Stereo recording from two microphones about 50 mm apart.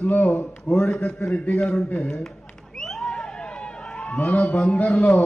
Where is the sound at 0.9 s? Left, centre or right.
Centre.